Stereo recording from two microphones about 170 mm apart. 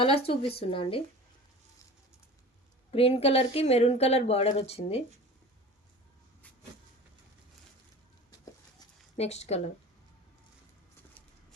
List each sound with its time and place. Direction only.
0.0 s a woman's voice: 35° left (ahead or behind)
2.9 s a woman's voice: 35° left (ahead or behind)
9.1 s a woman's voice: 40° left (ahead or behind)